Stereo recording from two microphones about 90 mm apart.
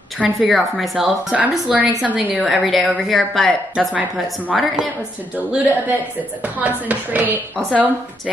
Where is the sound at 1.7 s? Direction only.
15° right (ahead or behind).